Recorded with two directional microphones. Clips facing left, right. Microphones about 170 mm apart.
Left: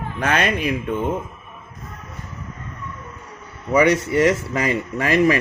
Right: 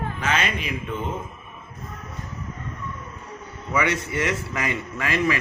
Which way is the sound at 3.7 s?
35° left (ahead or behind).